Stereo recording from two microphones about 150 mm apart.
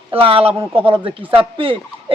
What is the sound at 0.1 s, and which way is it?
Speech, 40° right (ahead or behind).